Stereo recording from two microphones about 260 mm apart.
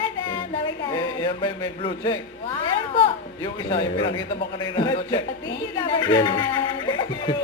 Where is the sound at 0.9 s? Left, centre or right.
Centre.